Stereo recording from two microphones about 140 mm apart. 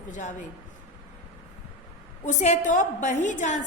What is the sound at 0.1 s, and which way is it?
Speech, 60° left (ahead or behind).